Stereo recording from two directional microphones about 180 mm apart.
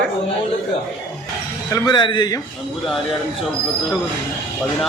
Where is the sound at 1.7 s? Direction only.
25° left (ahead or behind).